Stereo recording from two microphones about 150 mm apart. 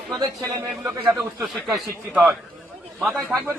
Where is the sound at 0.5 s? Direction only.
15° right (ahead or behind).